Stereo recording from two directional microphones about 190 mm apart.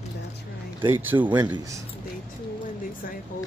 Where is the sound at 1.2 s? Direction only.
25° right (ahead or behind).